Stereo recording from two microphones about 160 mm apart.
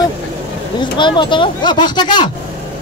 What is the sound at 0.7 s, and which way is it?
Speech, 30° left (ahead or behind).